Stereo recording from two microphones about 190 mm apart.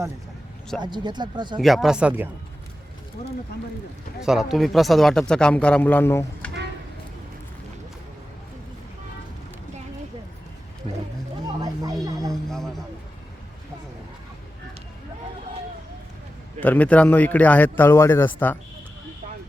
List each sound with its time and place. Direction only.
0.8 s speech: 25° right (ahead or behind)
1.5 s a man's voice: centre (ahead or behind)
4.2 s a man's voice: centre (ahead or behind)
11.6 s a sound: 15° right (ahead or behind)
12.3 s music: centre (ahead or behind)
16.6 s speech: 10° left (ahead or behind)